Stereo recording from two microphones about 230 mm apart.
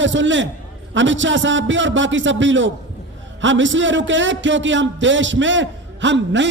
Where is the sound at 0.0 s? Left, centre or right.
Right.